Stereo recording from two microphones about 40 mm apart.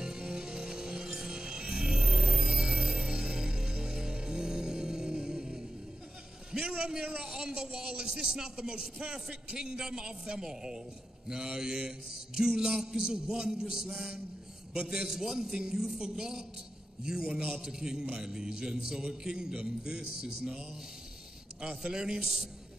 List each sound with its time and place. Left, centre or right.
0.0 s music: centre
6.6 s a man's voice: right
21.5 s a man's voice: centre